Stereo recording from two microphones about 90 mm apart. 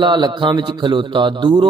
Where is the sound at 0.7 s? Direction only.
65° right (ahead or behind).